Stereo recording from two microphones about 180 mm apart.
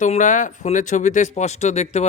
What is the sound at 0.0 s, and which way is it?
Speech, 45° left (ahead or behind).